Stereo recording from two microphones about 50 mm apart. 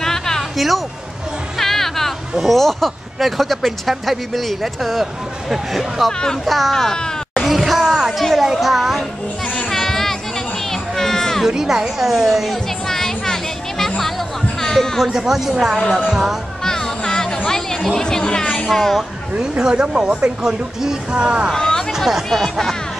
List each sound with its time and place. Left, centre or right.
0.0 s a sound: centre
1.6 s music: centre
2.4 s speech: centre
7.4 s a sound: centre
9.5 s music: centre
10.7 s children playing: centre
11.4 s speech: centre
12.8 s music: centre
15.0 s speech: centre
16.6 s music: centre
17.5 s children playing: centre
19.5 s speech: centre
21.5 s speech: centre
21.9 s speech: centre